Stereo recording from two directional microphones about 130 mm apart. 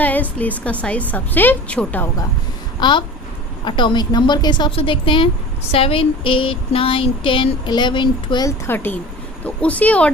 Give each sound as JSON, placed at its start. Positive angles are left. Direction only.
{"t": 0.0, "sound": "a woman's voice", "side_deg": 10}
{"t": 2.8, "sound": "a woman's voice", "side_deg": 35}
{"t": 5.7, "sound": "a sound", "side_deg": 45}
{"t": 8.4, "sound": "a woman's voice", "side_deg": 15}